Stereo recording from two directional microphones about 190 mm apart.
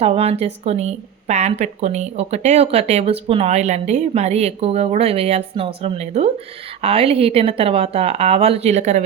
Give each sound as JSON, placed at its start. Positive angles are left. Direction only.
{"t": 0.0, "sound": "a woman's voice", "side_deg": -30}